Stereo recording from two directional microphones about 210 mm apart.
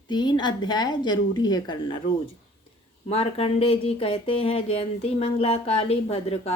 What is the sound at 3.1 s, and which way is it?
Speech, 30° left (ahead or behind).